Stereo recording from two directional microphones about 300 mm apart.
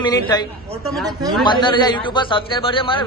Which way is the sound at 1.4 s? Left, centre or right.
Centre.